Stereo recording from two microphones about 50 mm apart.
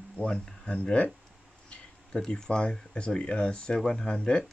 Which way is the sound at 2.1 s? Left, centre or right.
Centre.